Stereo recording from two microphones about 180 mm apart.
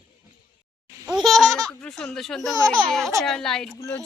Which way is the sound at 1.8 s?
5° left (ahead or behind).